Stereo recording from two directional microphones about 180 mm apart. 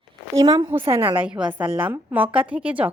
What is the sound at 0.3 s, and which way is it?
A woman's voice, 20° right (ahead or behind).